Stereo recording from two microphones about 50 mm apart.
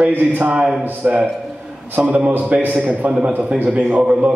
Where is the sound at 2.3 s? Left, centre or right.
Right.